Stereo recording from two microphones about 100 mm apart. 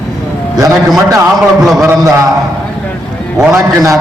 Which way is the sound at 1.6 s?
5° right (ahead or behind).